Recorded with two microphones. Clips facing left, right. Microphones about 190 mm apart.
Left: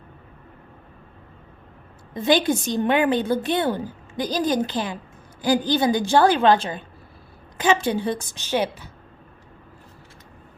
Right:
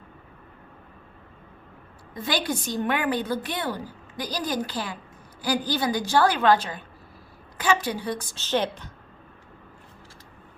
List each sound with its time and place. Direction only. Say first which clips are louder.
2.1 s a woman's voice: left 8 dB; 25° left (ahead or behind)